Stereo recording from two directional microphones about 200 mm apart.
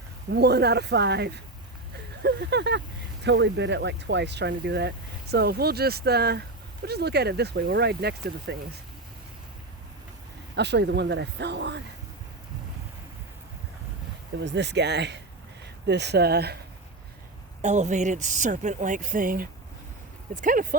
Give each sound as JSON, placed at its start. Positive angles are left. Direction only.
{"t": 0.3, "sound": "speech", "side_deg": -55}
{"t": 10.5, "sound": "speech", "side_deg": -60}
{"t": 14.4, "sound": "speech", "side_deg": -60}
{"t": 17.6, "sound": "speech", "side_deg": -35}